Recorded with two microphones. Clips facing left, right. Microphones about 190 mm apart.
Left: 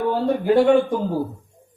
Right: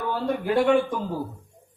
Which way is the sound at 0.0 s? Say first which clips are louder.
Left 6 dB; 30° left (ahead or behind).